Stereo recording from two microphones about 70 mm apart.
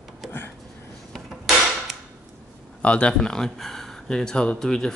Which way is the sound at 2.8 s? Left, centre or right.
Centre.